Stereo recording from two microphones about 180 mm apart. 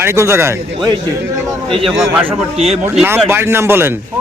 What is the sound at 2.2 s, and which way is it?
Speech, 35° right (ahead or behind).